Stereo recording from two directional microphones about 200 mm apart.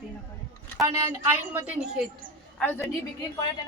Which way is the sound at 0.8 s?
15° right (ahead or behind).